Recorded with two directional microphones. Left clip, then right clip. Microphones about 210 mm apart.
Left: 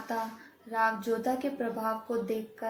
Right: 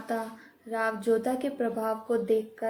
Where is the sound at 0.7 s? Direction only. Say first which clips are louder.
Right 2 dB; 50° right (ahead or behind).